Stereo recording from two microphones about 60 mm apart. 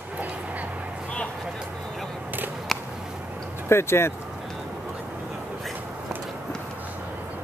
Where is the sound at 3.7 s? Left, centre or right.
Left.